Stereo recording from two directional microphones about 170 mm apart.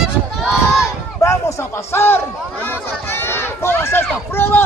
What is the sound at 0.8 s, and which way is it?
A man's voice, 15° left (ahead or behind).